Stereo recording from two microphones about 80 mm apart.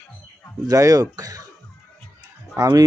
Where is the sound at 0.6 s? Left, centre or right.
Right.